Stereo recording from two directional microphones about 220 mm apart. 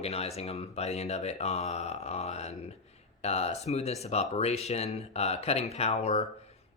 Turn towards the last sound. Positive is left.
turn(degrees=30)  # may be behind; listen again after turning